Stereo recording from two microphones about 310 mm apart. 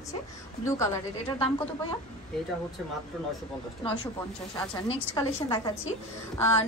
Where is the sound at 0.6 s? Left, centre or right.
Centre.